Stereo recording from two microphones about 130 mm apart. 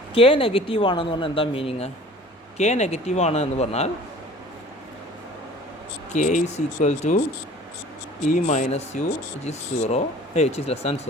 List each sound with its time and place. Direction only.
0.1 s speech: 45° left (ahead or behind)
2.6 s speech: 60° left (ahead or behind)
6.1 s speech: 70° left (ahead or behind)
8.3 s speech: 65° left (ahead or behind)